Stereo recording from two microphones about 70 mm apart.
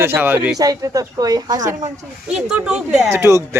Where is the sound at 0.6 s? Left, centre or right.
Right.